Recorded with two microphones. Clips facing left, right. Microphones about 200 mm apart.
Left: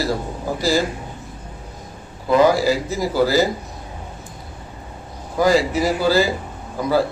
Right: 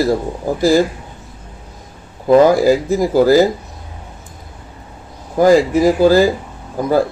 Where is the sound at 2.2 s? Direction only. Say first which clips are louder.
Right 6 dB; 50° right (ahead or behind).